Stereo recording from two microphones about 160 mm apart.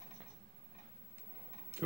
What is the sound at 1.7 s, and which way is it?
Tick-tock, 15° right (ahead or behind).